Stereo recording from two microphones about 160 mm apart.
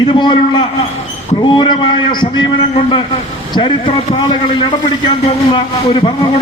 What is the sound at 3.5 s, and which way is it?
A man's voice, 30° left (ahead or behind).